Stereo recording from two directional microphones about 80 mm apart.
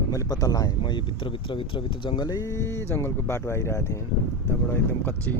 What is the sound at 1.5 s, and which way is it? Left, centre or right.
Speech, left.